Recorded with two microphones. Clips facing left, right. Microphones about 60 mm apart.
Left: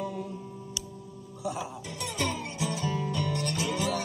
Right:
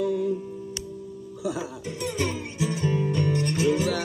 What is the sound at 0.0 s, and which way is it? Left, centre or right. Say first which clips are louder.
Music: right 10 dB; right.